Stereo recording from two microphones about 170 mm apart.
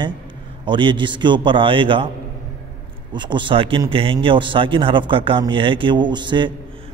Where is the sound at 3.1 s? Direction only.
25° right (ahead or behind).